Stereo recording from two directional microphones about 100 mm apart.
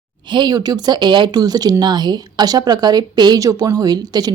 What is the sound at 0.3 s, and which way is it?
Speech, 45° right (ahead or behind).